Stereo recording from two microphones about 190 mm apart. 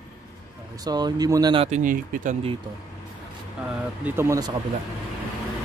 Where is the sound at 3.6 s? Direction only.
5° right (ahead or behind).